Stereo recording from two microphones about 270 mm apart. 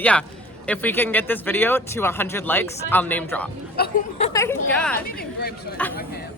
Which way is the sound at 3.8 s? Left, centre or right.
Left.